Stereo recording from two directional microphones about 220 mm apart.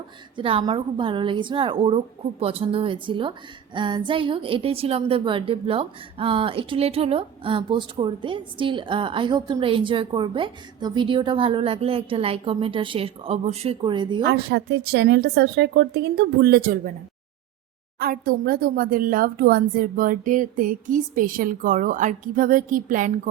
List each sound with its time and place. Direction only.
0.3 s a woman's voice: 25° right (ahead or behind)
14.3 s a woman's voice: 50° right (ahead or behind)
18.0 s speech: 40° right (ahead or behind)